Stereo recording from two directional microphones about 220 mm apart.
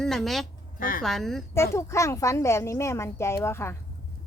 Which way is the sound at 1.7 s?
15° left (ahead or behind).